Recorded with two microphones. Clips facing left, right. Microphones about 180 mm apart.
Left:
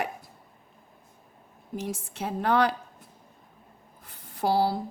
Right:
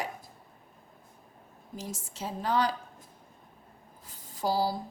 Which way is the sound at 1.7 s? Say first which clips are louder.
Left 7 dB; 60° left (ahead or behind).